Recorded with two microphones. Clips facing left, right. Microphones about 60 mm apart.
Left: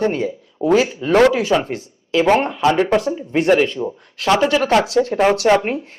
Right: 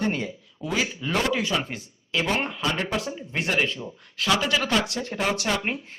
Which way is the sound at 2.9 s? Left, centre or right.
Left.